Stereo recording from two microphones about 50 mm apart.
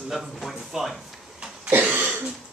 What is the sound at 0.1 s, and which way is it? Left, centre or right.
Speech, centre.